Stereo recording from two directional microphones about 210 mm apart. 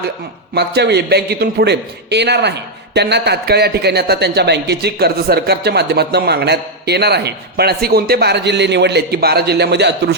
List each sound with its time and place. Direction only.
0.5 s a man's voice: 50° right (ahead or behind)